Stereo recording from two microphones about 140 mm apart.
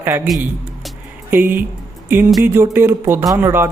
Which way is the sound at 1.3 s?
15° right (ahead or behind).